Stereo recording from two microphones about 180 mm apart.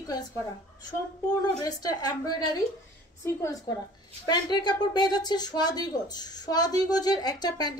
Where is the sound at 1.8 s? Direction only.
20° left (ahead or behind).